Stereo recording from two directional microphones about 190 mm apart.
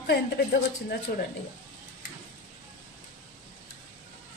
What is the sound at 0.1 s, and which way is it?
A woman's voice, 60° left (ahead or behind).